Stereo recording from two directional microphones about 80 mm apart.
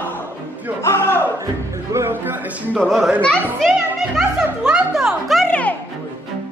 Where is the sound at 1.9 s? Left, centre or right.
Right.